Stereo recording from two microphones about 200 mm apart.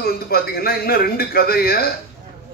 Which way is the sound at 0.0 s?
50° left (ahead or behind).